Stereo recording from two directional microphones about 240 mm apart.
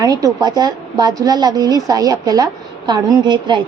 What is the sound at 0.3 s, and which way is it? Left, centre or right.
A woman's voice, centre.